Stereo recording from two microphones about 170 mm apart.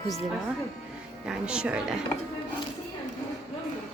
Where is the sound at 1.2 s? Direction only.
5° right (ahead or behind).